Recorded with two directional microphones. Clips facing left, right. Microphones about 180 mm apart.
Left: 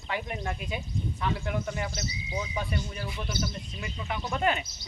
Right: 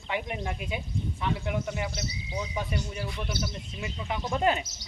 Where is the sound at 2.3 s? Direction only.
Centre (ahead or behind).